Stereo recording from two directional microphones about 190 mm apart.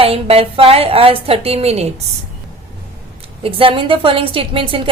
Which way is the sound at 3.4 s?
30° right (ahead or behind).